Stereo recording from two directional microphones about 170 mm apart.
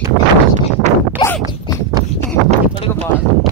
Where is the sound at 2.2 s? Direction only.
40° right (ahead or behind).